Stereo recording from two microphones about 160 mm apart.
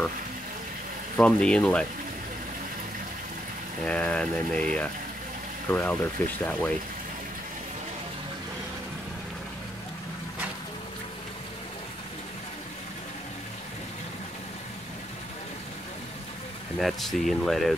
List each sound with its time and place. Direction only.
1.1 s speech: 5° left (ahead or behind)
3.8 s speech: 5° left (ahead or behind)
16.7 s speech: centre (ahead or behind)